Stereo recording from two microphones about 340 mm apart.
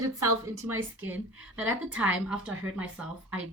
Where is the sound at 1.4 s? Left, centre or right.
Centre.